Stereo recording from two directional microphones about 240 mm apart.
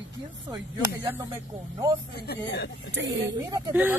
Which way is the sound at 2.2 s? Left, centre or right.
Left.